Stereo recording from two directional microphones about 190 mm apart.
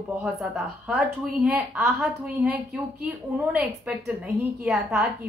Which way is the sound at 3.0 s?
5° right (ahead or behind).